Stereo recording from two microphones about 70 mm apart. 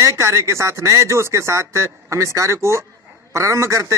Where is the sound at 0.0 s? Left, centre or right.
Right.